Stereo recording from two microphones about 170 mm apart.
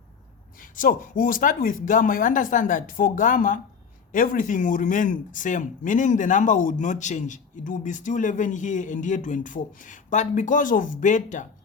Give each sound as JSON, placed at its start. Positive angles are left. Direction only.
{"t": 0.6, "sound": "speech", "side_deg": 55}